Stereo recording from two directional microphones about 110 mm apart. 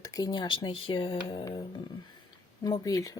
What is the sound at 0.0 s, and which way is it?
Speech, 35° left (ahead or behind).